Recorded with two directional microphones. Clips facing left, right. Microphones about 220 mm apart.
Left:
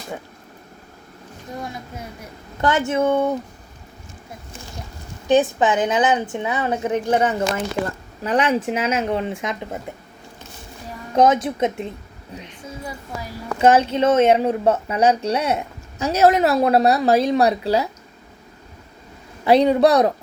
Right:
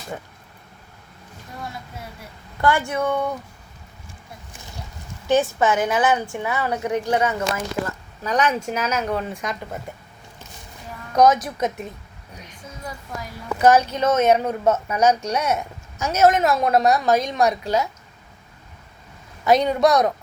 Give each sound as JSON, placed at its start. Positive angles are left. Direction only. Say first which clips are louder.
{"t": 2.6, "sound": "speech", "louder": "left 2 dB", "side_deg": 20}
{"t": 5.3, "sound": "speech", "louder": "left 2 dB", "side_deg": 15}
{"t": 11.1, "sound": "speech", "louder": "left 1 dB", "side_deg": 25}
{"t": 13.6, "sound": "speech", "louder": "left 1 dB", "side_deg": 25}
{"t": 19.5, "sound": "speech", "louder": "left 3 dB", "side_deg": 30}